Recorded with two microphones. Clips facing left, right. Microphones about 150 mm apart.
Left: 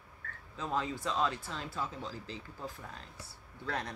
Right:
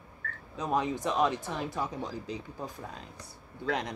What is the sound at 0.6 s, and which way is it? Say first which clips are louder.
Speech: right 5 dB; 15° right (ahead or behind).